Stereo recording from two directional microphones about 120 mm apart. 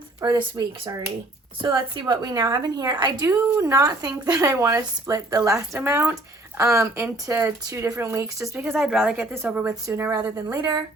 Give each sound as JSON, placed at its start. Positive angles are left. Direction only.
{"t": 0.3, "sound": "a woman's voice", "side_deg": -35}
{"t": 8.6, "sound": "speech", "side_deg": 0}
{"t": 9.1, "sound": "a woman's voice", "side_deg": -15}